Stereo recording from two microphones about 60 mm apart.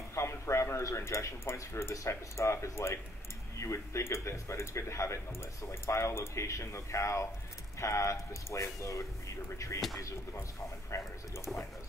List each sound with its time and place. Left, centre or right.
0.1 s speech: left